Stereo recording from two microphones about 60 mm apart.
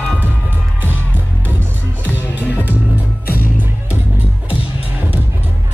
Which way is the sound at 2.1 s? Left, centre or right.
Right.